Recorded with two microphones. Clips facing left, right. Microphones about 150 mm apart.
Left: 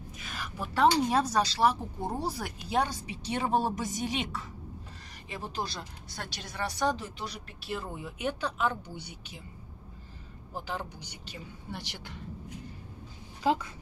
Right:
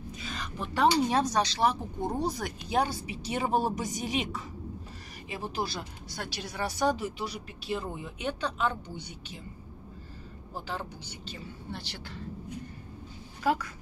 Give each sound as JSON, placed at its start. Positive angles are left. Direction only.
{"t": 0.3, "sound": "speech", "side_deg": 5}
{"t": 2.8, "sound": "speech", "side_deg": -5}
{"t": 10.5, "sound": "speech", "side_deg": 15}
{"t": 13.4, "sound": "speech", "side_deg": 20}